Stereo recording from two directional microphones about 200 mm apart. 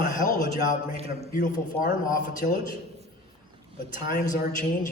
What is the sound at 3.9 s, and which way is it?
Speech, 45° left (ahead or behind).